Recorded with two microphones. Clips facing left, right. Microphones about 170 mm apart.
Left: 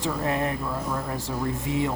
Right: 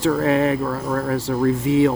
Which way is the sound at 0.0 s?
80° right.